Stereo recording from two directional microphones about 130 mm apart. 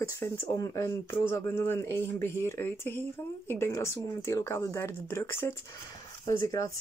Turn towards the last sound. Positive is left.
turn(degrees=25)  # may be behind; listen again after turning